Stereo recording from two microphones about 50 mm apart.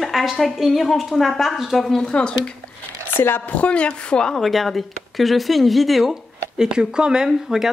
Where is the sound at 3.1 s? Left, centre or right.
Left.